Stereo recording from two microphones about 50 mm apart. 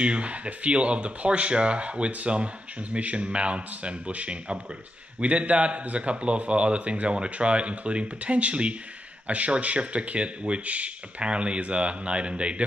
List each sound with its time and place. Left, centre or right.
0.0 s speech: right